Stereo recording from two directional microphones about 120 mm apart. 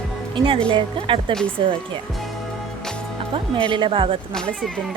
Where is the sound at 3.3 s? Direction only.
45° right (ahead or behind).